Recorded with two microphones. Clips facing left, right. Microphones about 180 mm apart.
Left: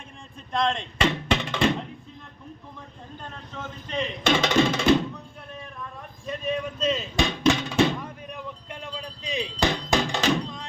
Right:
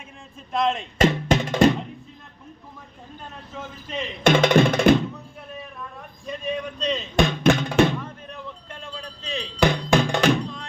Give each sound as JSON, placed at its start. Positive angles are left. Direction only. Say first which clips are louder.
{"t": 0.5, "sound": "music", "louder": "right 2 dB", "side_deg": -5}
{"t": 0.9, "sound": "music", "louder": "right 7 dB", "side_deg": -45}
{"t": 4.2, "sound": "music", "louder": "right 5 dB", "side_deg": -55}
{"t": 6.2, "sound": "speech", "louder": "even", "side_deg": 0}
{"t": 7.2, "sound": "speech", "louder": "right 4 dB", "side_deg": -55}
{"t": 8.0, "sound": "a sound", "louder": "even", "side_deg": 15}
{"t": 9.6, "sound": "music", "louder": "right 5 dB", "side_deg": -60}